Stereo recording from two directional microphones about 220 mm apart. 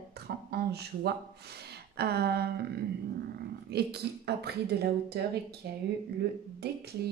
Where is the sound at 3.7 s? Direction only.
45° right (ahead or behind).